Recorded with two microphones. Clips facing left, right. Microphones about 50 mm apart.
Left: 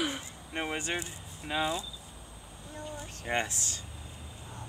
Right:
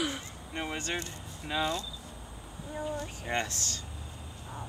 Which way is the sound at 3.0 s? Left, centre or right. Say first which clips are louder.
Left 1 dB; centre.